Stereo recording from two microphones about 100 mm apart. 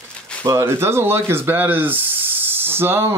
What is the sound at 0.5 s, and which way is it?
Speech, 30° right (ahead or behind).